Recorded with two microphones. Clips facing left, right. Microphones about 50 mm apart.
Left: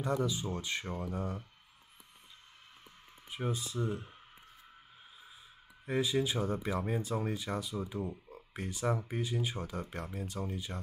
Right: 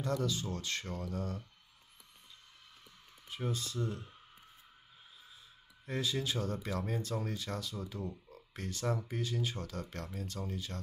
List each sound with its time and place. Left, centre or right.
0.0 s speech: centre
3.3 s speech: centre
5.9 s speech: centre